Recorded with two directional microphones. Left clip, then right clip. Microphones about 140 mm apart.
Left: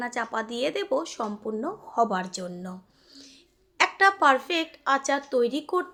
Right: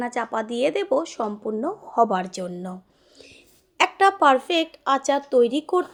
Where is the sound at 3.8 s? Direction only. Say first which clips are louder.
Right 3 dB; 30° right (ahead or behind).